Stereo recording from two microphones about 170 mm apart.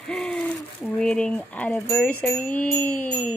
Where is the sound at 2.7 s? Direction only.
10° left (ahead or behind).